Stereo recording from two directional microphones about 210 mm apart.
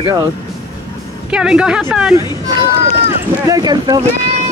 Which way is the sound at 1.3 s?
5° right (ahead or behind).